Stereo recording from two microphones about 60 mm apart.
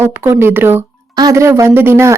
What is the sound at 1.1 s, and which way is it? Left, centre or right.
Speech, right.